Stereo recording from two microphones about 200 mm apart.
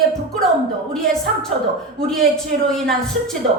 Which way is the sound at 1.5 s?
30° right (ahead or behind).